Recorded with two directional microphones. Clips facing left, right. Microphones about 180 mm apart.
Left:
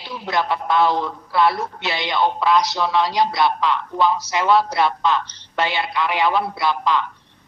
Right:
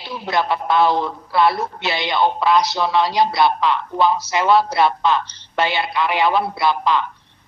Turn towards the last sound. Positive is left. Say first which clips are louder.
# right 2 dB
turn(degrees=-30)  # may be behind; listen again after turning